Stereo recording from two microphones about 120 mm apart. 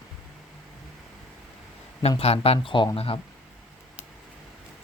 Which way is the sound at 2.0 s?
55° left (ahead or behind).